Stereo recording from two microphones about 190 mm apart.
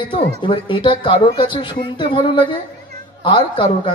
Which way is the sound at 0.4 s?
25° left (ahead or behind).